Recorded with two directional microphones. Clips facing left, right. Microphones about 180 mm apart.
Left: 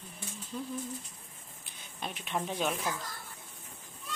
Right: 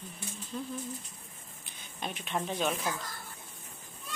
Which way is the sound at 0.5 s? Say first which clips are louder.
Right 1 dB; 5° left (ahead or behind).